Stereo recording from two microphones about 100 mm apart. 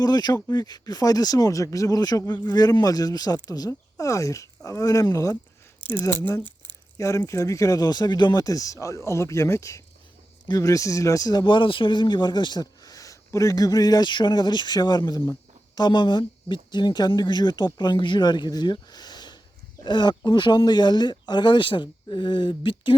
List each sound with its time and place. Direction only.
0.0 s speech: 45° left (ahead or behind)
6.9 s speech: 30° left (ahead or behind); by 23.0 s 55° left (ahead or behind)